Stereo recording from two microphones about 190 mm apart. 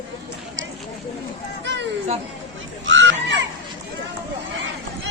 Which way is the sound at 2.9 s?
80° right.